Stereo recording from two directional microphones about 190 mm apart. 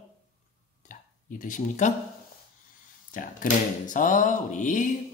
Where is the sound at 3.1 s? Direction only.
45° left (ahead or behind).